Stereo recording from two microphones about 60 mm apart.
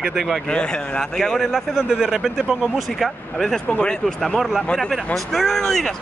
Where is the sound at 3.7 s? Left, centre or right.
Left.